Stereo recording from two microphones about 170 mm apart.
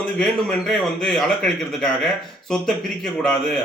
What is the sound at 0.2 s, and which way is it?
A man's voice, 5° left (ahead or behind).